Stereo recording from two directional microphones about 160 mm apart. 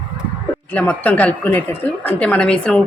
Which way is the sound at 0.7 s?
10° left (ahead or behind).